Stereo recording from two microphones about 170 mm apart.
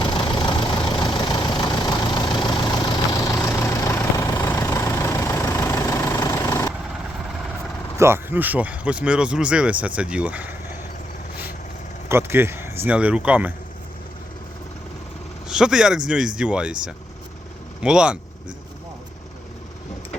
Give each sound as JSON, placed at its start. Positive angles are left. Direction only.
{"t": 0.0, "sound": "vehicle", "side_deg": 30}
{"t": 7.9, "sound": "speech", "side_deg": -15}
{"t": 12.0, "sound": "speech", "side_deg": -15}
{"t": 15.4, "sound": "speech", "side_deg": -5}